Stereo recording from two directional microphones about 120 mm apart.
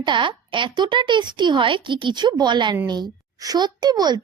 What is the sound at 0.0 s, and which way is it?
A child's voice, 40° right (ahead or behind).